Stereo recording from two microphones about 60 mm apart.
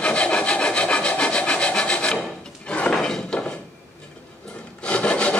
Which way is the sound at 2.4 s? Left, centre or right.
Centre.